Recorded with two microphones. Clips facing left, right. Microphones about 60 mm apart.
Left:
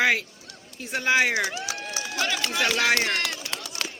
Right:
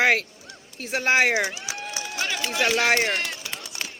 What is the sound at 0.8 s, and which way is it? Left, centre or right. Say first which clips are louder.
Speech: right 1 dB; right.